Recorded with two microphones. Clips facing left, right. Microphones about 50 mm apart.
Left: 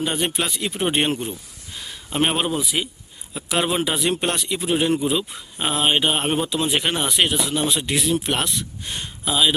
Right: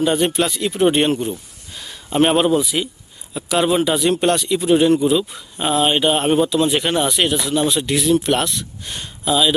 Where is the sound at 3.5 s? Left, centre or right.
Centre.